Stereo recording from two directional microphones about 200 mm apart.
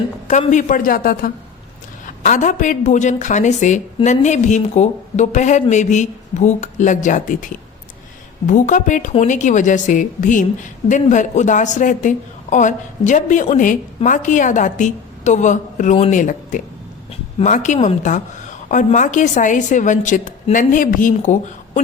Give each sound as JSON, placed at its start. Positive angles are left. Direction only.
{"t": 0.3, "sound": "a man's voice", "side_deg": 40}